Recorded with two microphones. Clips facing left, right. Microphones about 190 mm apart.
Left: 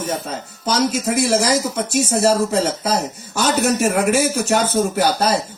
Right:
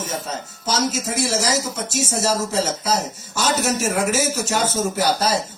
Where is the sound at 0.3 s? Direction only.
55° left (ahead or behind).